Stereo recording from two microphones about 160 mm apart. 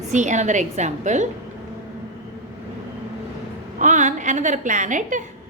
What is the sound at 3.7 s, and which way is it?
A woman's voice, 50° right (ahead or behind).